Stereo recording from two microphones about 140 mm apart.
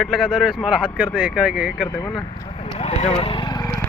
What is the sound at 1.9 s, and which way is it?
Speech, 25° left (ahead or behind).